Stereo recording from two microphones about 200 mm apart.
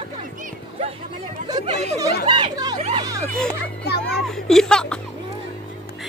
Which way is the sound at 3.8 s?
55° left (ahead or behind).